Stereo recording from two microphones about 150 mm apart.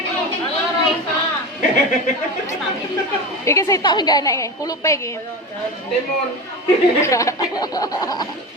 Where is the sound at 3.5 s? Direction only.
20° left (ahead or behind).